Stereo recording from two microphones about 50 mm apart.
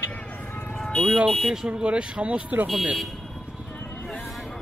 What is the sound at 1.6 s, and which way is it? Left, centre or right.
Speech, right.